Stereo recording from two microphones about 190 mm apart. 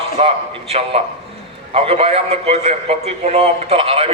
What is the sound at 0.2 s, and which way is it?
A man's voice, 30° right (ahead or behind).